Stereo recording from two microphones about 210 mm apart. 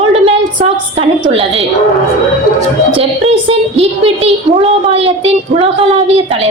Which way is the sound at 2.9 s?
25° right (ahead or behind).